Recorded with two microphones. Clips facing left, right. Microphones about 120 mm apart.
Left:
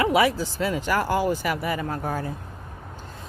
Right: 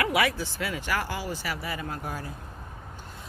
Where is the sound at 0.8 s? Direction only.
45° left (ahead or behind).